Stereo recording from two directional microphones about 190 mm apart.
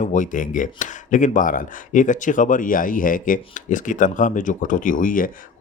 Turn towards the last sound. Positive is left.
turn(degrees=45)  # may be behind; listen again after turning